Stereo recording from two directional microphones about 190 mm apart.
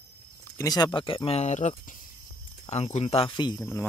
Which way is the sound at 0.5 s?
20° left (ahead or behind).